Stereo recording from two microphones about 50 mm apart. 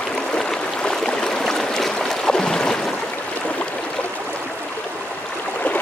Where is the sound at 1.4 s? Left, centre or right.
Centre.